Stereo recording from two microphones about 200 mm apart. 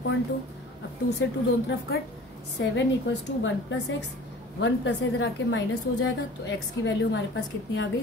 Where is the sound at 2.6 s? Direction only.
65° left (ahead or behind).